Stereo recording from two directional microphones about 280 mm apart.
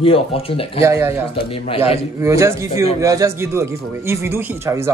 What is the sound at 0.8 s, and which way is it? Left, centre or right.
Speech, centre.